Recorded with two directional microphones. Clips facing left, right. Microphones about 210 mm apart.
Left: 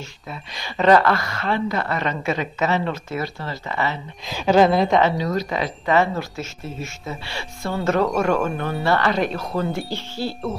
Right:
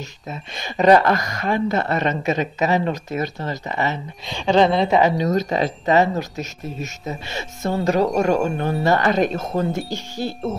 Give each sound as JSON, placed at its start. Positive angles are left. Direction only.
{"t": 0.6, "sound": "a woman's voice", "side_deg": -15}
{"t": 4.3, "sound": "a woman's voice", "side_deg": 5}
{"t": 5.1, "sound": "a woman's voice", "side_deg": -20}
{"t": 9.2, "sound": "speech", "side_deg": -45}
{"t": 9.5, "sound": "a woman's voice", "side_deg": -20}